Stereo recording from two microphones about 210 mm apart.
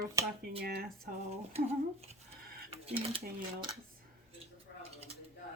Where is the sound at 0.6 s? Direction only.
45° right (ahead or behind).